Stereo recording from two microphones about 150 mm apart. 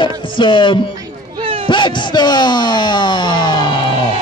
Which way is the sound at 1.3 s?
35° right (ahead or behind).